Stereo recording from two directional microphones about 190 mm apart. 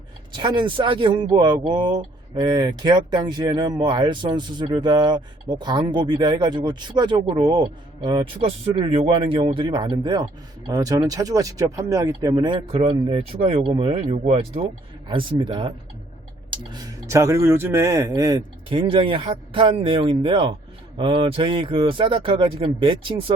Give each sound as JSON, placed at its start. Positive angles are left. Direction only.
{"t": 0.3, "sound": "speech", "side_deg": -25}